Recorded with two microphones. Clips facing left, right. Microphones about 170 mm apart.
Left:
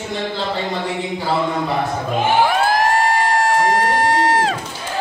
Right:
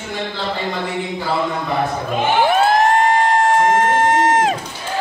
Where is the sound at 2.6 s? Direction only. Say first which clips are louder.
Right 2 dB; 25° right (ahead or behind).